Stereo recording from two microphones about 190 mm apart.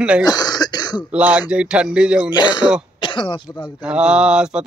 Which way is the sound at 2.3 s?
25° left (ahead or behind).